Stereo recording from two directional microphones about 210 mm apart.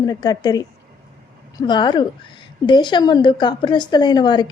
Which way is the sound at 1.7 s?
20° left (ahead or behind).